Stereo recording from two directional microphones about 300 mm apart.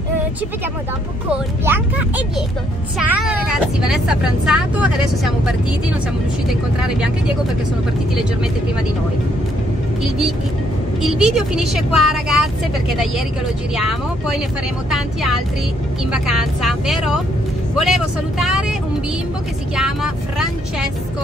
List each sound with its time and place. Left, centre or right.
1.3 s speech: centre
6.8 s speech: centre
11.0 s speech: centre
13.7 s speech: centre